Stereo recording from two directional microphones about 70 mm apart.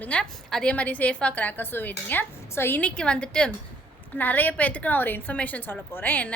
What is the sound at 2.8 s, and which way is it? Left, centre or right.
Speech, centre.